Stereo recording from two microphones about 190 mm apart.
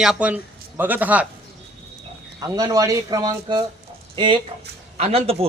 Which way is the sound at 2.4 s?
20° right (ahead or behind).